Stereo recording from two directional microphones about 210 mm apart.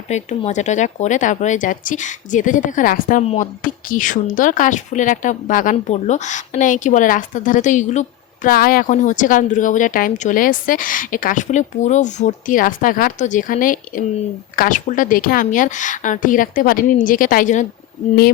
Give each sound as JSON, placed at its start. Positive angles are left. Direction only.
{"t": 0.1, "sound": "a woman's voice", "side_deg": 35}